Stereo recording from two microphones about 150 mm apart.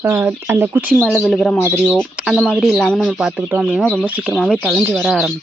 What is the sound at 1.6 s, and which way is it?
Speech, 15° left (ahead or behind).